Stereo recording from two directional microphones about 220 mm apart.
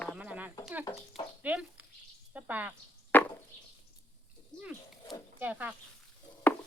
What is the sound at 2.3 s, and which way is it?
Speech, 5° right (ahead or behind).